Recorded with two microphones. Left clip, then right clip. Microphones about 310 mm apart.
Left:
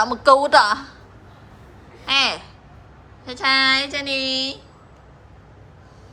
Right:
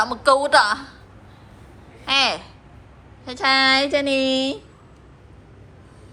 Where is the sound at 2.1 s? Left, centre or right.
Centre.